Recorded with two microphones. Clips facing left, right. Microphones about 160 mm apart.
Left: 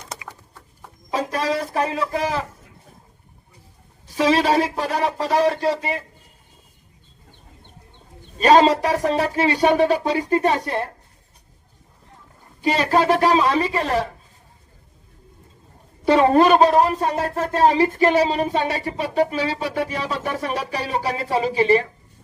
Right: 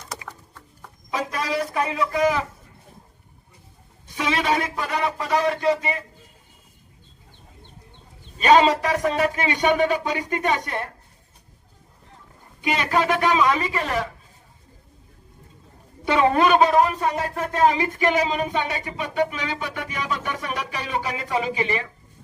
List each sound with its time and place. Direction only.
1.1 s speech: 35° left (ahead or behind)
4.1 s speech: 35° left (ahead or behind)
8.4 s speech: 35° left (ahead or behind)
12.6 s speech: 35° left (ahead or behind)
16.0 s speech: 35° left (ahead or behind)